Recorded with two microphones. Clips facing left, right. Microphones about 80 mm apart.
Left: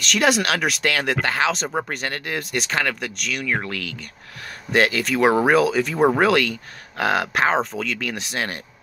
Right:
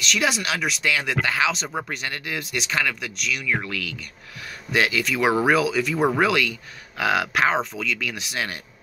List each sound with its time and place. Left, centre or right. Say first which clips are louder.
0.0 s speech: left 4 dB; left
6.2 s speech: left 3 dB; left